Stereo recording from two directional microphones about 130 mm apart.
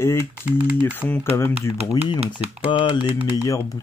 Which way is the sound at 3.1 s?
25° left (ahead or behind).